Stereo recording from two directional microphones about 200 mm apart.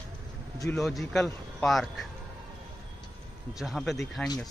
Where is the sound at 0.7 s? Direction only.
Centre (ahead or behind).